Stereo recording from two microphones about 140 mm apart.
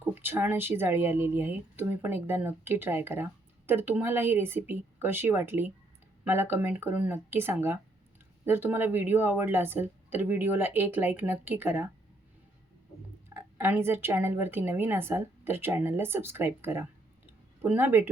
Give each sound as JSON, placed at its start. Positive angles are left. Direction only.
{"t": 0.0, "sound": "speech", "side_deg": -15}
{"t": 13.3, "sound": "speech", "side_deg": -15}